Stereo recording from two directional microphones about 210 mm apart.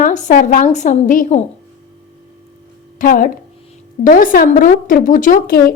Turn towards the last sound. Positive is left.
turn(degrees=45)  # may be behind; listen again after turning